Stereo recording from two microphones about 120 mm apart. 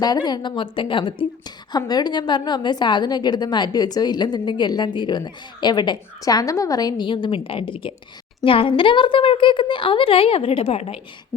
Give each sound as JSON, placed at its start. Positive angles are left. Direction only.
{"t": 0.0, "sound": "a woman's voice", "side_deg": 35}